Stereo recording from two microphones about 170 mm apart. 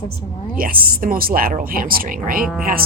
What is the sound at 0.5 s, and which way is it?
Speech, 60° right (ahead or behind).